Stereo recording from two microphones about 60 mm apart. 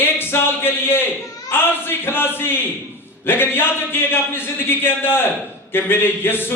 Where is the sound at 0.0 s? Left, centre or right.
Left.